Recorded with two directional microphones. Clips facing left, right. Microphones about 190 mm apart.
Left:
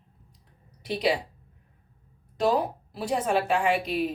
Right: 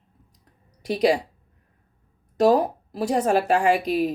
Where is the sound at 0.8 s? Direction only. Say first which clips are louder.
Right 6 dB; 45° right (ahead or behind).